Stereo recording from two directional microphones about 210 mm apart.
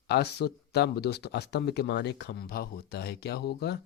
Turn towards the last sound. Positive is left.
turn(degrees=50)  # may be behind; listen again after turning